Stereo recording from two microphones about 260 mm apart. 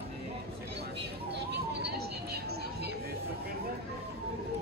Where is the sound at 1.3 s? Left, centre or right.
Right.